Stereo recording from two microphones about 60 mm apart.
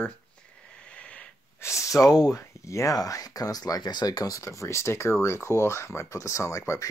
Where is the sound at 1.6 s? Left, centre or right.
Left.